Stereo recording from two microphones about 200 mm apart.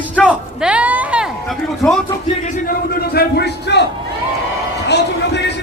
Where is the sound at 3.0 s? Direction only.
50° left (ahead or behind).